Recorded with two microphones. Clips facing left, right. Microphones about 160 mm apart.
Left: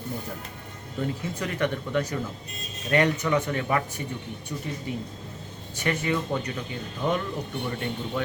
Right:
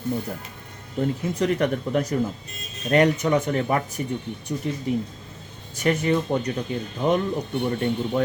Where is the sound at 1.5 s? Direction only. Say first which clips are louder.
Right 3 dB; 40° right (ahead or behind).